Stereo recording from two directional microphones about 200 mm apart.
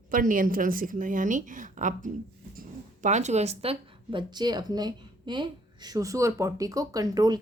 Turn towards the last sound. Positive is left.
turn(degrees=-20)  # may be behind; listen again after turning